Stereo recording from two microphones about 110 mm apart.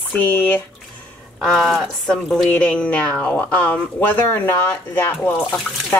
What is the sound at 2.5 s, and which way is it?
Speech, 15° left (ahead or behind).